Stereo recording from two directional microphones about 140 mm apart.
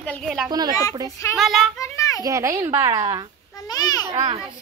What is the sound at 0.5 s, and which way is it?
Speech, 30° right (ahead or behind).